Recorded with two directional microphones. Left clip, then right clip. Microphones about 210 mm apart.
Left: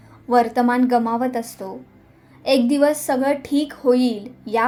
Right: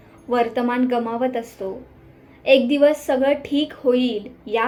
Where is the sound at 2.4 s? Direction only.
45° left (ahead or behind).